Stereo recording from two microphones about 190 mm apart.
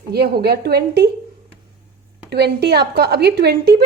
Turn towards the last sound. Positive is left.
turn(degrees=-60)  # may be behind; listen again after turning